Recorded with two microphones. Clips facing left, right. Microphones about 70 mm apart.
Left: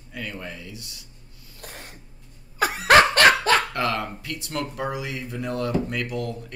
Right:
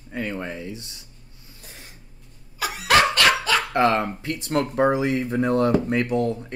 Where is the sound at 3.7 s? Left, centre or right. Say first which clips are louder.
Right 6 dB; right.